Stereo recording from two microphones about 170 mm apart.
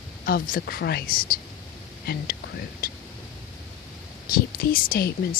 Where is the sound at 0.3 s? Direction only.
55° left (ahead or behind).